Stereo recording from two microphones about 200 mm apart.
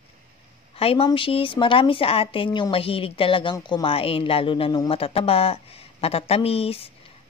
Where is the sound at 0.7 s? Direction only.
30° left (ahead or behind).